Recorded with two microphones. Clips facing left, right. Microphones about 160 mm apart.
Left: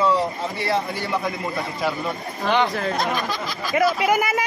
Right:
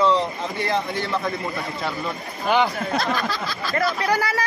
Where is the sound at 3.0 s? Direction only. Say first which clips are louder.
Even; 20° left (ahead or behind).